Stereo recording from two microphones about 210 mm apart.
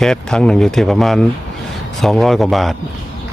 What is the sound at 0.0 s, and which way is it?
Speech, 5° left (ahead or behind).